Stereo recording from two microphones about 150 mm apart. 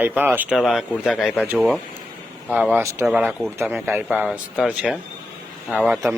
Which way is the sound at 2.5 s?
10° right (ahead or behind).